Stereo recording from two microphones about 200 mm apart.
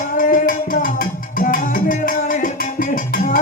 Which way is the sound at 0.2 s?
40° left (ahead or behind).